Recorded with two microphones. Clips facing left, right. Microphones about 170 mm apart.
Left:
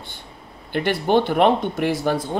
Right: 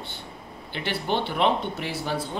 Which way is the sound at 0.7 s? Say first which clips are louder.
Left 9 dB; 50° left (ahead or behind).